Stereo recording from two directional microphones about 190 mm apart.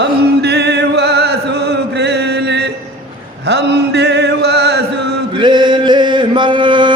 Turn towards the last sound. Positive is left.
turn(degrees=-25)  # may be behind; listen again after turning